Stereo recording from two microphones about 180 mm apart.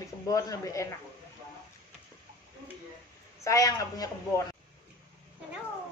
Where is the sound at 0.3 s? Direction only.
20° left (ahead or behind).